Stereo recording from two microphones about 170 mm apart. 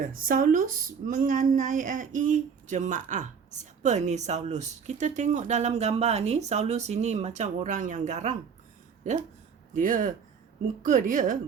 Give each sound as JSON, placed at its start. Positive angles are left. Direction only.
{"t": 0.0, "sound": "speech", "side_deg": -55}
{"t": 9.7, "sound": "speech", "side_deg": -50}